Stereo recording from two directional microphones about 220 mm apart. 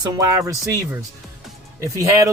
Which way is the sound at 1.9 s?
15° right (ahead or behind).